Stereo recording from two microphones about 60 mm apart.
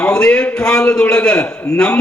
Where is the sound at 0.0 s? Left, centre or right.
Centre.